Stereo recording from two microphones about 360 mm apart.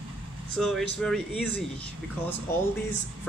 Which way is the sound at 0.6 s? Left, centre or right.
Centre.